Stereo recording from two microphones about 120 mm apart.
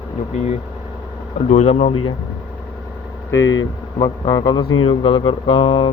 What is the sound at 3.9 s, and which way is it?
Speech, 40° left (ahead or behind).